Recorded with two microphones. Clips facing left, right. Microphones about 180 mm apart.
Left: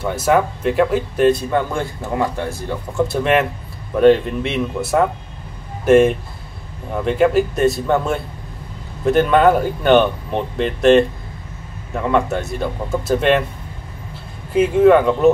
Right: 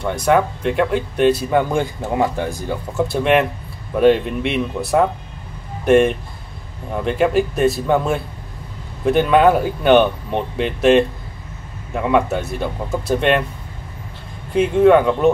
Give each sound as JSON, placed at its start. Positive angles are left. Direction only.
{"t": 0.0, "sound": "speech", "side_deg": 5}
{"t": 1.5, "sound": "a man's voice", "side_deg": -15}
{"t": 2.9, "sound": "speech", "side_deg": 0}
{"t": 14.5, "sound": "speech", "side_deg": 5}